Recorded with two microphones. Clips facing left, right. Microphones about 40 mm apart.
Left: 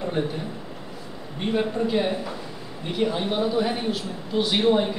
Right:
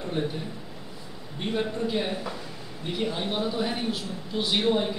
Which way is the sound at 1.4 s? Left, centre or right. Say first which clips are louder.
Left 4 dB; centre.